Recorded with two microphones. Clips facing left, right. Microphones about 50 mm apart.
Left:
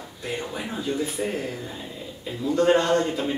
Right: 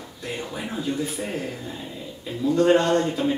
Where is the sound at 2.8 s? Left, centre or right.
Centre.